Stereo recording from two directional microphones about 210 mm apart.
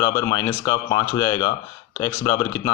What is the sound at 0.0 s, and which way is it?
Speech, 15° left (ahead or behind).